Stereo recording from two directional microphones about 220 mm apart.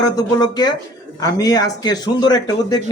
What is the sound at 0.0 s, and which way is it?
Speech, 15° left (ahead or behind).